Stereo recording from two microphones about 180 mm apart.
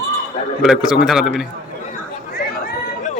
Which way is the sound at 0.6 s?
Centre (ahead or behind).